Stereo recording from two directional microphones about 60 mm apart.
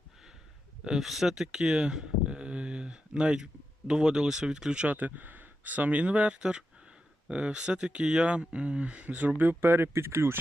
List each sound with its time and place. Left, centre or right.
0.9 s speech: centre; by 10.3 s right